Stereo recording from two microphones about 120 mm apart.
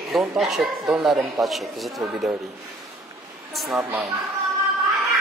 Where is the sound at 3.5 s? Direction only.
Centre (ahead or behind).